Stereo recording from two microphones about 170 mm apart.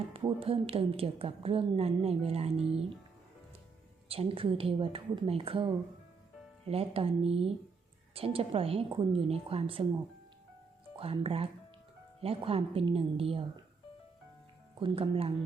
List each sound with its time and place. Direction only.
0.1 s a woman's voice: 35° right (ahead or behind)
4.1 s a woman's voice: 35° right (ahead or behind)
10.9 s a woman's voice: 30° right (ahead or behind)
14.8 s a woman's voice: 30° right (ahead or behind)